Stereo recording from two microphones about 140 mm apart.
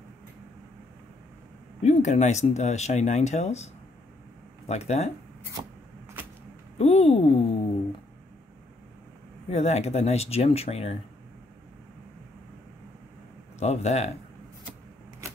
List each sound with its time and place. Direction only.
1.8 s speech: 55° left (ahead or behind)
6.8 s speech: 50° left (ahead or behind)
9.5 s speech: 50° left (ahead or behind)
13.6 s speech: 50° left (ahead or behind)